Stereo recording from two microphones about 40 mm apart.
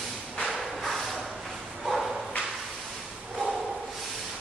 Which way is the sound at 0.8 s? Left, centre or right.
Centre.